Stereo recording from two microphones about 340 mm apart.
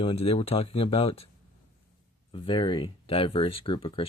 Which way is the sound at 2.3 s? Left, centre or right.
Centre.